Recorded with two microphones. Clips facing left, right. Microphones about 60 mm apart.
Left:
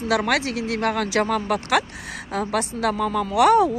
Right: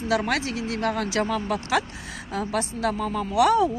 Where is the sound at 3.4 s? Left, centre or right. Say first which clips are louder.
Left 3 dB; left.